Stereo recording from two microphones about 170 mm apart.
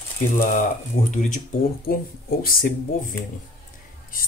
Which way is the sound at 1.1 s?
50° left (ahead or behind).